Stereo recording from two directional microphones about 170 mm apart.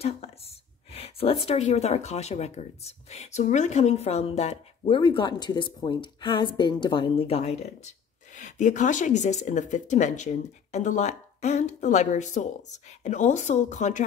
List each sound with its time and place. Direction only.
0.9 s speech: 35° left (ahead or behind)